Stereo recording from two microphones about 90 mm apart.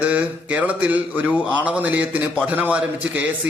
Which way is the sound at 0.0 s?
15° right (ahead or behind).